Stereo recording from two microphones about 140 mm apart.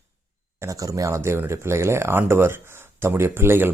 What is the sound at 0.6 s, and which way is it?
Speech, 25° right (ahead or behind).